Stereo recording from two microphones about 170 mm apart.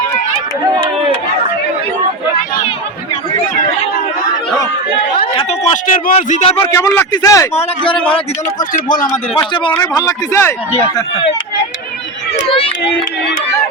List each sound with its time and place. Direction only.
5.1 s speech: 30° left (ahead or behind)
6.6 s a man's voice: 20° left (ahead or behind)
8.5 s speech: 50° left (ahead or behind)
9.5 s a man's voice: 30° left (ahead or behind)
12.5 s run: 30° left (ahead or behind)